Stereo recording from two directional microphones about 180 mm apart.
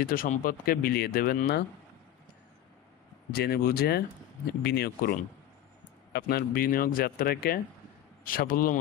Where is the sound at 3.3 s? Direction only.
60° left (ahead or behind).